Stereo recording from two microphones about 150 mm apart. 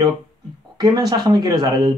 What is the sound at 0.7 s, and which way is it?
Speech, 25° right (ahead or behind).